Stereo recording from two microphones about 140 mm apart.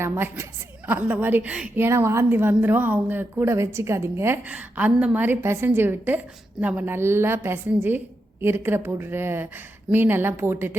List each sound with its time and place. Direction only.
0.0 s a woman's voice: 20° right (ahead or behind)